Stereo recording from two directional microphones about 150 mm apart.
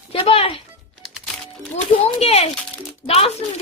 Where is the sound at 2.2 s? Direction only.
45° left (ahead or behind).